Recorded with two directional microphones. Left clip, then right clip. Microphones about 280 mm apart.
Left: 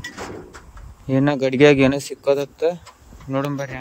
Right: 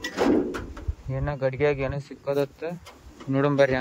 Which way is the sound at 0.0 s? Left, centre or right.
Right.